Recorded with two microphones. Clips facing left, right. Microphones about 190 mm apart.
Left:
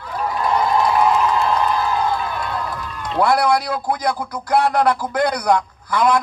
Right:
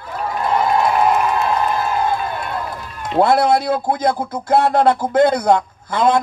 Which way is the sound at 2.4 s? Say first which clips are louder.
Even; 25° right (ahead or behind).